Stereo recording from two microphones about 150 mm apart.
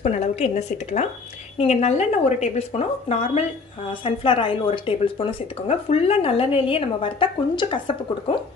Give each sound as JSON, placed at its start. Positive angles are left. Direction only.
{"t": 0.0, "sound": "a woman's voice", "side_deg": 45}